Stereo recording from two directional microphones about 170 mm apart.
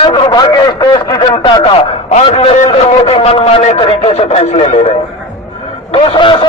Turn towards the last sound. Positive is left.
turn(degrees=30)  # may be behind; listen again after turning